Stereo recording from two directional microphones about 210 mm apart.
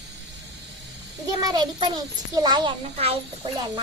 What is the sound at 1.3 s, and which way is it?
A child's voice, 20° right (ahead or behind).